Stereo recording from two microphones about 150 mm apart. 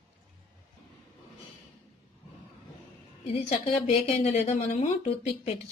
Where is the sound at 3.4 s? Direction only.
45° left (ahead or behind).